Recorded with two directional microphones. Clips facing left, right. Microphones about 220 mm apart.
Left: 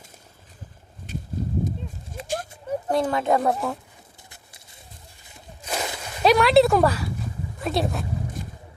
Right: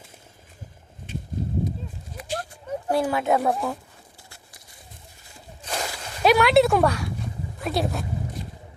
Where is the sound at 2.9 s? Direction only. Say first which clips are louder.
Even; 5° right (ahead or behind).